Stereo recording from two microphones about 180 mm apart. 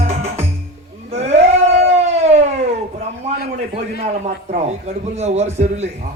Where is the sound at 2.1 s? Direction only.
40° right (ahead or behind).